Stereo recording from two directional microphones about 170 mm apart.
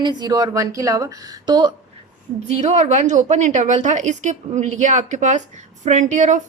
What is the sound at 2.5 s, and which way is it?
A woman's voice, 40° right (ahead or behind).